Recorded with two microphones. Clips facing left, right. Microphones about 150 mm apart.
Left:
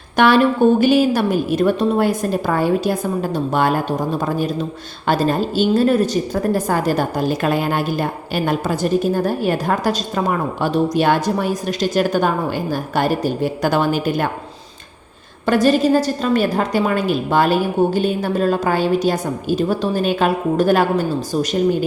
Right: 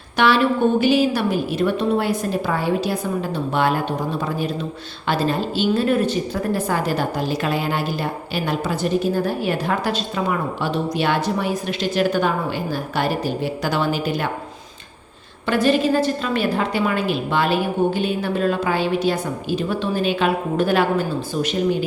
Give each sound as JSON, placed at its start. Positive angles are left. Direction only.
{"t": 0.2, "sound": "a woman's voice", "side_deg": 45}
{"t": 15.4, "sound": "a woman's voice", "side_deg": 40}